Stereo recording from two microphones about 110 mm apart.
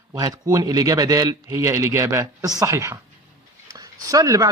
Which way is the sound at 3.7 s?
35° right (ahead or behind).